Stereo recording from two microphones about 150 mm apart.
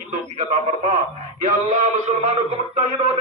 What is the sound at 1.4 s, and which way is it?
Male singing, 50° right (ahead or behind).